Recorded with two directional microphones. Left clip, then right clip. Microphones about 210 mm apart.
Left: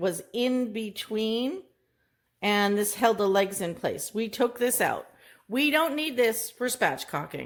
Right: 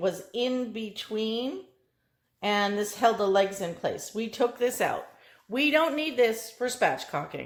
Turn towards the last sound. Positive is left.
turn(degrees=45)  # may be behind; listen again after turning